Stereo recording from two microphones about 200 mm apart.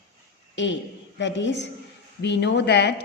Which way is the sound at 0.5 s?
65° left (ahead or behind).